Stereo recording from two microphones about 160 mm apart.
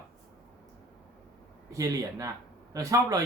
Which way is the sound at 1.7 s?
20° right (ahead or behind).